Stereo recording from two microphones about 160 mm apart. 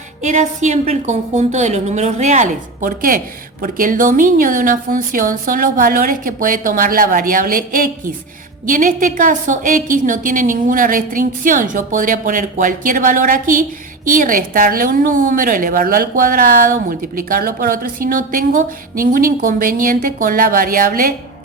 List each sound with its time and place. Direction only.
0.2 s a woman's voice: 50° right (ahead or behind)